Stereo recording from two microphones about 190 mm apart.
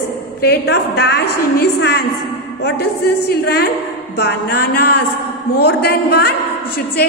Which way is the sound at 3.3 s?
55° left (ahead or behind).